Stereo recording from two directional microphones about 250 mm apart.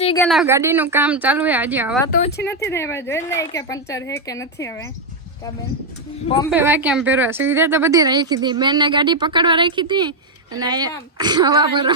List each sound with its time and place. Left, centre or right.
0.2 s speech: centre
0.4 s speech: centre
2.3 s speech: left
2.6 s speech: centre
6.5 s speech: centre